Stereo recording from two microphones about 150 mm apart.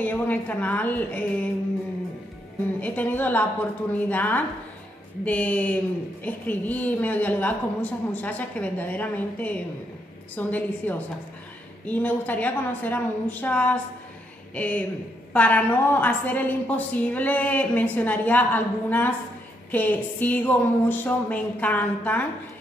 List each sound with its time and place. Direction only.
0.0 s a woman's voice: 10° left (ahead or behind)
2.8 s a woman's voice: 10° left (ahead or behind)